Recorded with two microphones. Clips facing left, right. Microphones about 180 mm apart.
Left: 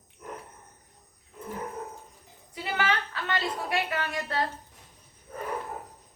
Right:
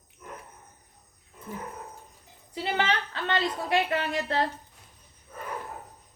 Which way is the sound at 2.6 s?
30° right (ahead or behind).